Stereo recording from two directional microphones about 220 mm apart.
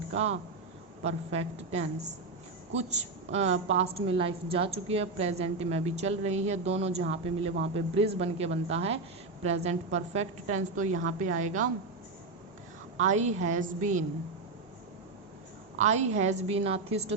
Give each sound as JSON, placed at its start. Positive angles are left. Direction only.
{"t": 1.0, "sound": "a woman's voice", "side_deg": -30}
{"t": 13.0, "sound": "a woman's voice", "side_deg": -30}
{"t": 15.8, "sound": "a woman's voice", "side_deg": -30}